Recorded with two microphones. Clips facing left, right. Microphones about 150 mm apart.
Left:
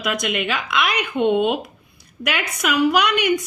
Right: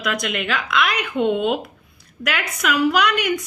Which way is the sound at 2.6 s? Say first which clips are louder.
Left 1 dB; 10° left (ahead or behind).